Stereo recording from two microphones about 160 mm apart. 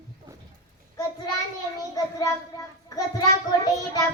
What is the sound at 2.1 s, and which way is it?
A child's voice, 20° left (ahead or behind).